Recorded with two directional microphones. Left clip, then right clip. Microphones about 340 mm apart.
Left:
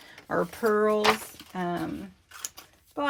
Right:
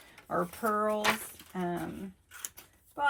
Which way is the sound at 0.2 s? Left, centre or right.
Left.